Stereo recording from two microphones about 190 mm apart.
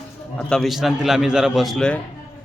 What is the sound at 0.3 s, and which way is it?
Speech, centre (ahead or behind).